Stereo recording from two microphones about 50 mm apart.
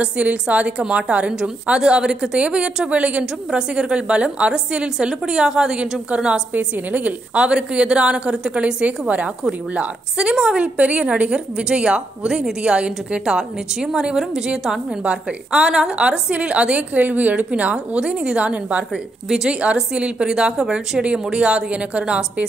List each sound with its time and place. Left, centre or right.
0.0 s a woman's voice: right
19.2 s a woman's voice: centre
19.6 s a woman's voice: right
21.0 s a woman's voice: right